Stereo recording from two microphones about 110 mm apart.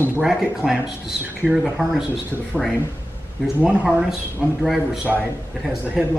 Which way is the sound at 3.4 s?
5° right (ahead or behind).